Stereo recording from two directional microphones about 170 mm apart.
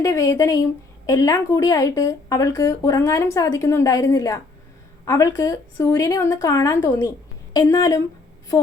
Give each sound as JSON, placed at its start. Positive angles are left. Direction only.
{"t": 0.0, "sound": "a woman's voice", "side_deg": 20}